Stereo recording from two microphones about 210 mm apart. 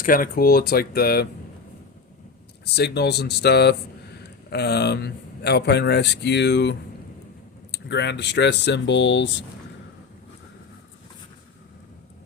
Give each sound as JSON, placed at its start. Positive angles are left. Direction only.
{"t": 0.0, "sound": "speech", "side_deg": 40}
{"t": 2.7, "sound": "speech", "side_deg": 50}